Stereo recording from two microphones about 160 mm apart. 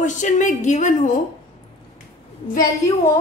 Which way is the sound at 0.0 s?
50° left (ahead or behind).